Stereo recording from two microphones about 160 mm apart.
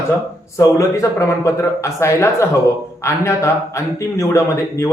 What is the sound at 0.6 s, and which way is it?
Speech, 20° left (ahead or behind).